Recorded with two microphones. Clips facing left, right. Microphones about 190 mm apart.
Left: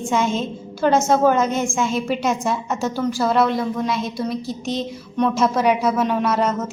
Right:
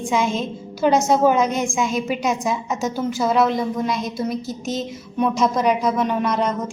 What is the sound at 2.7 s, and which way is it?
Speech, 20° right (ahead or behind).